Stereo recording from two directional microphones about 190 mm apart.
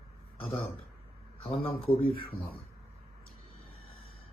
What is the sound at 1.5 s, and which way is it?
Speech, 30° left (ahead or behind).